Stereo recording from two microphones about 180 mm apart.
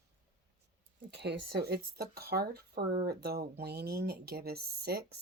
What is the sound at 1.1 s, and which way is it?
Speech, 70° right (ahead or behind).